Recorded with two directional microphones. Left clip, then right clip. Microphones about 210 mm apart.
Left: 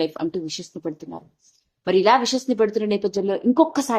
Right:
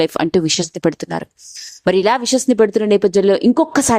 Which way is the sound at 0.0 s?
50° right (ahead or behind).